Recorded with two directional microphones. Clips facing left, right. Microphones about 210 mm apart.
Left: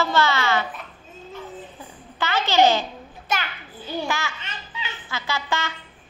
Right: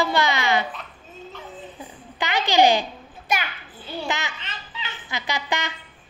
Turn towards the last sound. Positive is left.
turn(degrees=-15)  # may be behind; listen again after turning